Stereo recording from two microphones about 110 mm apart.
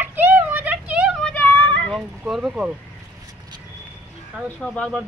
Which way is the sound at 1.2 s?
15° left (ahead or behind).